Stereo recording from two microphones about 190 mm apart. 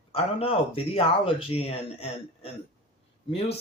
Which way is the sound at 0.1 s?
30° left (ahead or behind).